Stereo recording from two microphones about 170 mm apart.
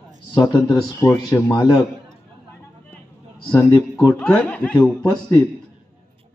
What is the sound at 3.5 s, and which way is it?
Speech, 20° left (ahead or behind).